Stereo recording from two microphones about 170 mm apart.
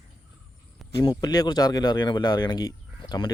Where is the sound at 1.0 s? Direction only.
25° left (ahead or behind).